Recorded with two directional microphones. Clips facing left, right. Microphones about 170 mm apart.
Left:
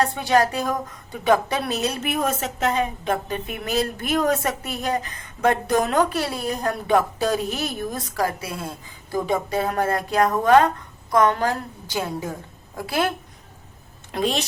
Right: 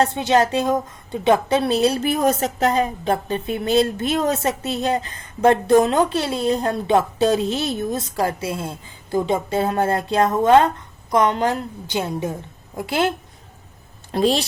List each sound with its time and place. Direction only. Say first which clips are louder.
0.0 s a woman's voice: right 2 dB; 25° right (ahead or behind)